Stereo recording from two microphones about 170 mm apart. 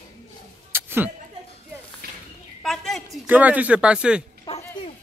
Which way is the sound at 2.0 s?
65° right (ahead or behind).